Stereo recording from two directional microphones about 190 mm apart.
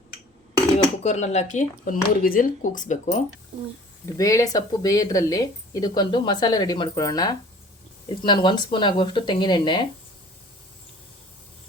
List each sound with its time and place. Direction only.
1.0 s speech: 35° left (ahead or behind)
4.0 s speech: 15° left (ahead or behind)